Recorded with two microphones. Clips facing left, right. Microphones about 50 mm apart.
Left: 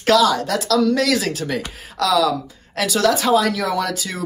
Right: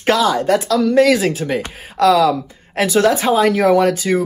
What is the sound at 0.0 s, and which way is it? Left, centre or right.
Speech, right.